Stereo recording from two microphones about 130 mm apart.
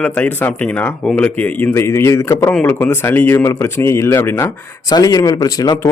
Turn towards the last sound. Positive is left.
turn(degrees=30)  # may be behind; listen again after turning